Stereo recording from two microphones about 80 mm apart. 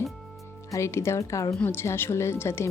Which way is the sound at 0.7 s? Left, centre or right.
Left.